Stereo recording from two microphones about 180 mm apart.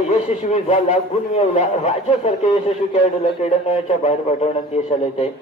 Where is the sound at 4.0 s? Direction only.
40° left (ahead or behind).